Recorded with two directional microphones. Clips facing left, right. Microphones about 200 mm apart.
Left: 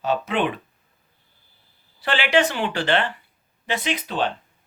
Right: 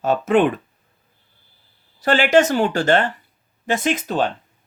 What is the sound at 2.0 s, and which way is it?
Speech, 45° right (ahead or behind).